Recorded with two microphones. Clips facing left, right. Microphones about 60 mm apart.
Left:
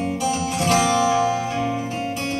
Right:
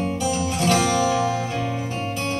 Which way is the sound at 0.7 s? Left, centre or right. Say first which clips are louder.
Left 3 dB; left.